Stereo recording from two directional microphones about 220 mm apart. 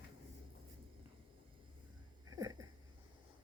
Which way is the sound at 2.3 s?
15° right (ahead or behind).